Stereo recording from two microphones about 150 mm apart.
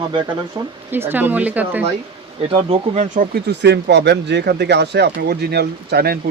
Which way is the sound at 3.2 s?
55° right (ahead or behind).